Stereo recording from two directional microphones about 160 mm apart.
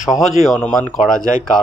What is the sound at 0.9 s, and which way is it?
Speech, 55° left (ahead or behind).